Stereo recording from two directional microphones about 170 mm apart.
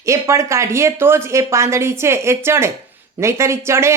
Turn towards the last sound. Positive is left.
turn(degrees=-15)  # may be behind; listen again after turning